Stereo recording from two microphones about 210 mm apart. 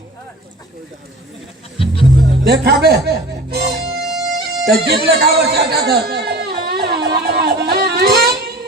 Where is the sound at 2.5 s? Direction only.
50° right (ahead or behind).